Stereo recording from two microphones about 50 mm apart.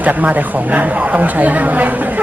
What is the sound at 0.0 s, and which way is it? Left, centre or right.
Speech, right.